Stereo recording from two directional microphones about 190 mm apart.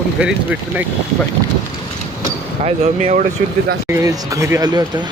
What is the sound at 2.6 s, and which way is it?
Speech, 35° right (ahead or behind).